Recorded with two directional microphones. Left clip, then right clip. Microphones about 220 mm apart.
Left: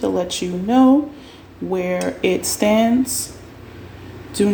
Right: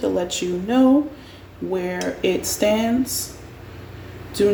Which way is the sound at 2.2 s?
35° left (ahead or behind).